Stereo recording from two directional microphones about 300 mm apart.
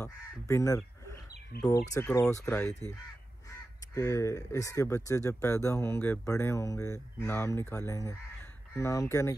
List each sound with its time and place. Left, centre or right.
0.0 s speech: centre
1.5 s speech: left
2.0 s speech: centre